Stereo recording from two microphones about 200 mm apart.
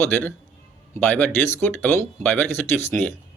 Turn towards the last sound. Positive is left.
turn(degrees=10)  # may be behind; listen again after turning